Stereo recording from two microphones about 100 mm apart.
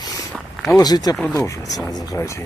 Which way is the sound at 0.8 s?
40° left (ahead or behind).